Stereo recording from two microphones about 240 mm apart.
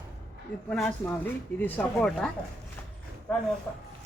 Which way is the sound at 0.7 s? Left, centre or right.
Centre.